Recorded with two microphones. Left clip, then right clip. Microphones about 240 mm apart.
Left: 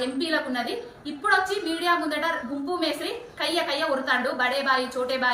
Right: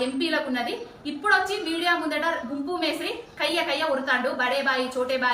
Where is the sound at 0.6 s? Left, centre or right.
Right.